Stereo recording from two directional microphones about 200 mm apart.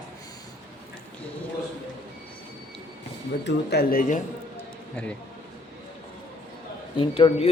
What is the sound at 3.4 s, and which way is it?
Speech, 55° left (ahead or behind).